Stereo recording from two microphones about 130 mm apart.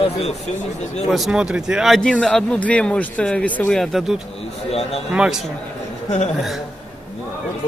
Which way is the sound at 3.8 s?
Centre (ahead or behind).